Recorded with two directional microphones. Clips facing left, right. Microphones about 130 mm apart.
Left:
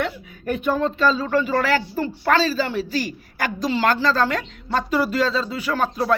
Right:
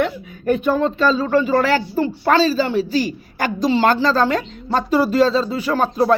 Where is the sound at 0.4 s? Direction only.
30° right (ahead or behind).